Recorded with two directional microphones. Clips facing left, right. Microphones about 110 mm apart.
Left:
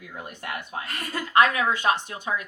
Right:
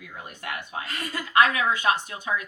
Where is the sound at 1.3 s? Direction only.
40° left (ahead or behind).